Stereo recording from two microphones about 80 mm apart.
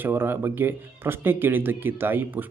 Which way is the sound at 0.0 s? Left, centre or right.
Right.